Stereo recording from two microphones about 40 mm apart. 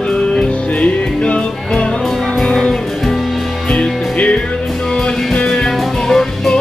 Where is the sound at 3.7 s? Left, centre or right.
Left.